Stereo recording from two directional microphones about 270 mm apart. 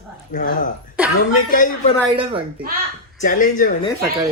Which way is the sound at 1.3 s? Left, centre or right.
Left.